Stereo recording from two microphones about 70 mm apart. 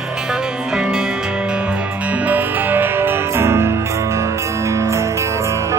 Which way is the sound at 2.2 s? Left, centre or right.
Right.